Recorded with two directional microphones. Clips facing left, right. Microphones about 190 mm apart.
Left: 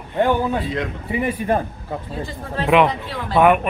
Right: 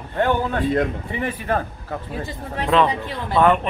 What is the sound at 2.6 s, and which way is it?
Speech, 15° left (ahead or behind).